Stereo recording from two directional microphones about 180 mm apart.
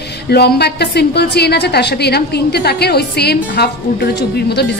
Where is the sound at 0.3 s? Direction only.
65° left (ahead or behind).